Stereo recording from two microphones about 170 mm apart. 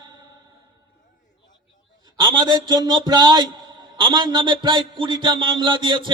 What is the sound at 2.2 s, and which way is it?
A man's voice, 25° right (ahead or behind).